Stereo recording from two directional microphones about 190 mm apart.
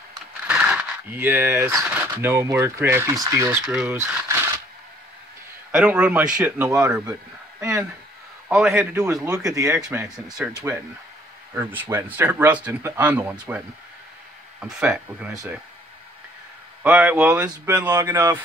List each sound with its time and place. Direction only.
0.5 s speech: 5° right (ahead or behind)
5.7 s speech: 5° right (ahead or behind)
8.5 s speech: centre (ahead or behind)
9.0 s speech: 15° right (ahead or behind)
9.8 s speech: 5° right (ahead or behind)
10.5 s speech: 15° right (ahead or behind)
14.6 s speech: 5° right (ahead or behind)
16.8 s speech: 5° right (ahead or behind)